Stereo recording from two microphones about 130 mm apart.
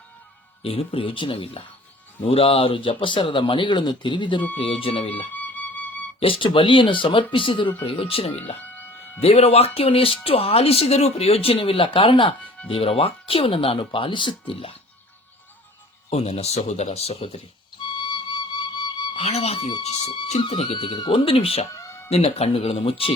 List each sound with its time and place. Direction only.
0.6 s speech: 50° left (ahead or behind)
5.3 s flute: 10° left (ahead or behind)
6.1 s speech: 45° left (ahead or behind)
8.6 s music: 15° left (ahead or behind)
9.2 s speech: 50° left (ahead or behind)
16.0 s speech: 55° left (ahead or behind)
17.8 s flute: 35° left (ahead or behind)
19.2 s speech: 50° left (ahead or behind)
21.7 s music: 25° left (ahead or behind)
22.1 s speech: 50° left (ahead or behind)